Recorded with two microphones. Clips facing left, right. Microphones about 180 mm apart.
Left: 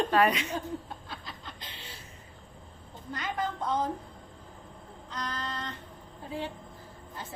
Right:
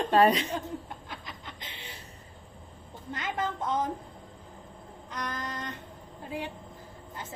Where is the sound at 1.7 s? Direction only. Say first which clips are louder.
Right 2 dB; 65° right (ahead or behind).